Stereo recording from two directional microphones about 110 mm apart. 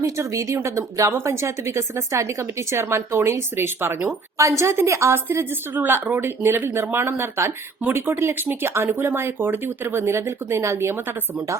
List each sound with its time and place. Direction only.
0.0 s speech: 30° right (ahead or behind)